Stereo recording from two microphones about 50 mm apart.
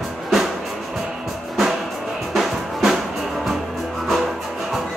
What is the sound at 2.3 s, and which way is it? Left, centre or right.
Music, centre.